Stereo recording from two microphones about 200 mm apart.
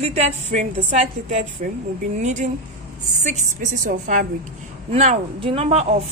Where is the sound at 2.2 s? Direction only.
35° right (ahead or behind).